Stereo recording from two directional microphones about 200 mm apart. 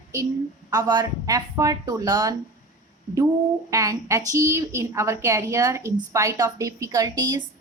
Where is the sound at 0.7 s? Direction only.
20° right (ahead or behind).